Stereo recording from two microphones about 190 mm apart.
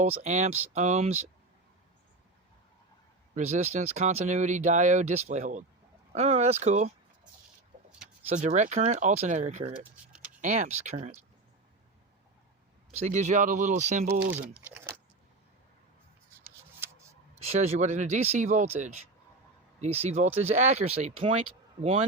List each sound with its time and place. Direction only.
0.0 s speech: 40° right (ahead or behind)
3.3 s speech: 35° right (ahead or behind)
8.3 s speech: 40° right (ahead or behind)
10.1 s a sound: 5° right (ahead or behind)
10.4 s speech: 35° right (ahead or behind)
12.9 s speech: 40° right (ahead or behind)
14.4 s crumpling: 10° right (ahead or behind)
17.3 s speech: 35° right (ahead or behind)